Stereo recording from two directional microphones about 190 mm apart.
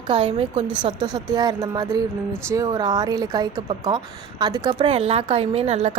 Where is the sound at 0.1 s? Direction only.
30° right (ahead or behind).